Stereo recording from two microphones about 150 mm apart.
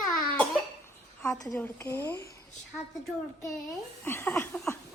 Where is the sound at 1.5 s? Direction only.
15° left (ahead or behind).